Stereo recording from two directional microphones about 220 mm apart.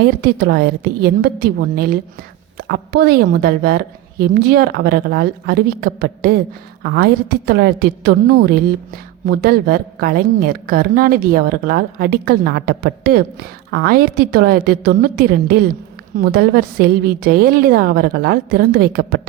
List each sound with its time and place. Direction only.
0.0 s a woman's voice: 45° right (ahead or behind)